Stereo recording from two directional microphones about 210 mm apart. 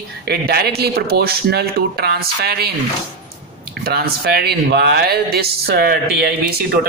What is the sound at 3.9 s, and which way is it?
Speech, 50° right (ahead or behind).